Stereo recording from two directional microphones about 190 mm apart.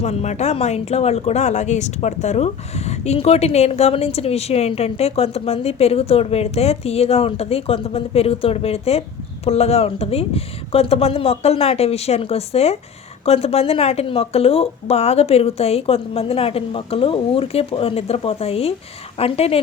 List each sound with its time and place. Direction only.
0.0 s speech: 35° left (ahead or behind)